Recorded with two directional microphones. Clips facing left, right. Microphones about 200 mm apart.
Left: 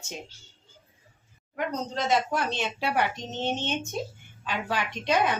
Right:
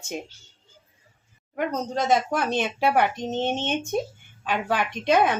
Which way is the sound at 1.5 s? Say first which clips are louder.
Right 4 dB; 45° right (ahead or behind).